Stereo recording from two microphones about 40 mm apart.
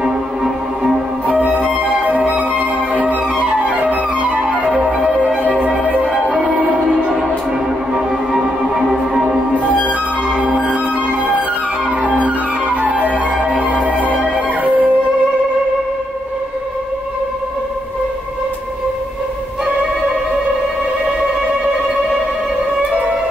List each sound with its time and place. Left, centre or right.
0.0 s music: centre
1.2 s music: right
3.0 s flute: right
3.8 s music: right
7.9 s music: centre
12.0 s flute: right
13.8 s music: right